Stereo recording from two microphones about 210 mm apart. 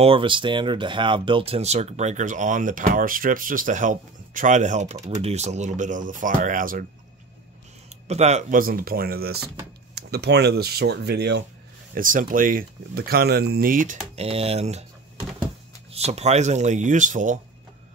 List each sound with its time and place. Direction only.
0.0 s speech: 25° right (ahead or behind); by 6.9 s 40° right (ahead or behind)
8.1 s speech: 30° right (ahead or behind); by 11.4 s 55° right (ahead or behind)
11.9 s speech: 40° right (ahead or behind)
15.9 s speech: 30° right (ahead or behind)